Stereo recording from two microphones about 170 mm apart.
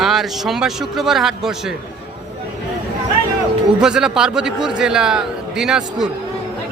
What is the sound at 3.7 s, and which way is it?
A man's voice, 5° right (ahead or behind).